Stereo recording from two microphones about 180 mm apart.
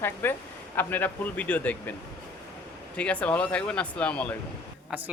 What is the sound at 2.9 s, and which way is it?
Speech, 5° left (ahead or behind).